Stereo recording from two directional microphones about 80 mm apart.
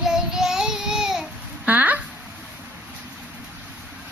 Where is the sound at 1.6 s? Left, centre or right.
Right.